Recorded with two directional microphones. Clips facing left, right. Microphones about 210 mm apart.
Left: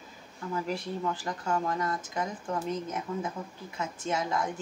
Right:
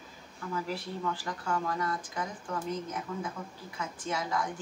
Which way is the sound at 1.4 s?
25° left (ahead or behind).